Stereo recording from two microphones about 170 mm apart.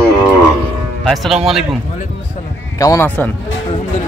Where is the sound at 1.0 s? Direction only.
Centre (ahead or behind).